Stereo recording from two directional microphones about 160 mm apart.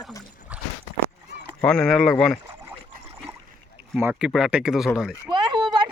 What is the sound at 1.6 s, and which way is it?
Speech, 5° left (ahead or behind).